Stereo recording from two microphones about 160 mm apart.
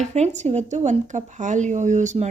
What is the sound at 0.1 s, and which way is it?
Speech, 45° right (ahead or behind).